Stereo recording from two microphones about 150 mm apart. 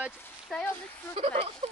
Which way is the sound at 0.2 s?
5° left (ahead or behind).